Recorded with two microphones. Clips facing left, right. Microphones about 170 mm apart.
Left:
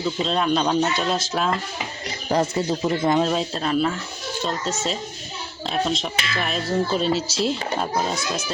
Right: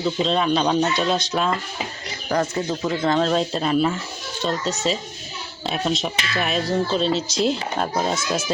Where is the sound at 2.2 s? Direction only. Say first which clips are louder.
Left 1 dB; 25° left (ahead or behind); by 6.1 s 5° right (ahead or behind).